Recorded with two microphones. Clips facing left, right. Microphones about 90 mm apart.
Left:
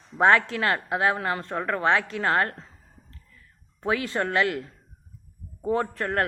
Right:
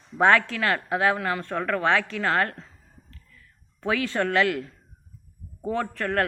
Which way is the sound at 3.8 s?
30° left (ahead or behind).